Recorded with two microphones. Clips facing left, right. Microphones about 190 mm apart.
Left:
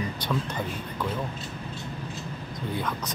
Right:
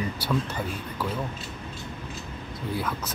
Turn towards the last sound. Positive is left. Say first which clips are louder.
# even
turn(degrees=-5)  # may be behind; listen again after turning